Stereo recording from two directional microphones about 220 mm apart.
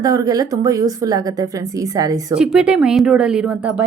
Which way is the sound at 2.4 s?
5° right (ahead or behind).